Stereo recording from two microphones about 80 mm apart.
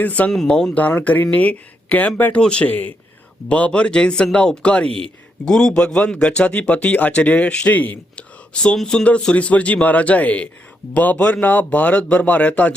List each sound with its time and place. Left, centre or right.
0.0 s speech: centre